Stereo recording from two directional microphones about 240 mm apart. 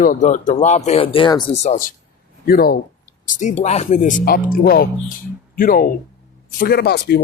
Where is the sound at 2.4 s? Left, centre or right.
Left.